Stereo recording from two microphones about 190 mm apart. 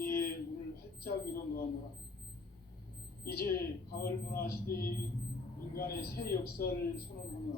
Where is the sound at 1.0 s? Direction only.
50° left (ahead or behind).